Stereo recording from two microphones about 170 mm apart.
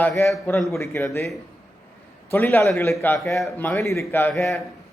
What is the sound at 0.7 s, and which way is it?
Speech, 15° left (ahead or behind).